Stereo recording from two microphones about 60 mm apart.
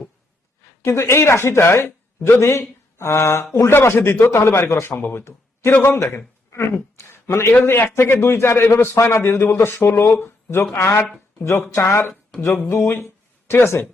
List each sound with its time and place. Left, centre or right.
0.9 s a man's voice: left